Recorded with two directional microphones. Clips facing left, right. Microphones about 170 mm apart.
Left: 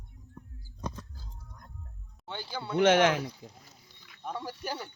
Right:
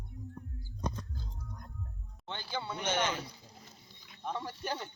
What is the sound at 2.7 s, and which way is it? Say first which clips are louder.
Speech: left 12 dB; 90° left.